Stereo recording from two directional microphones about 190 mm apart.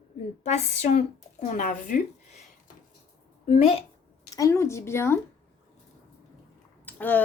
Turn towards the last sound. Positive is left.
turn(degrees=10)  # may be behind; listen again after turning